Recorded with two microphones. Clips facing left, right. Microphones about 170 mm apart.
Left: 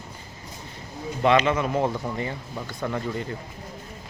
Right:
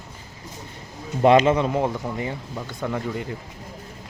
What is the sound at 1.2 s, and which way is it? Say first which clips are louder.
Speech: right 5 dB; 40° right (ahead or behind).